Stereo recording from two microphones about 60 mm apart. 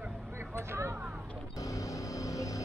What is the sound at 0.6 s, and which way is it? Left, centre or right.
Vehicle, right.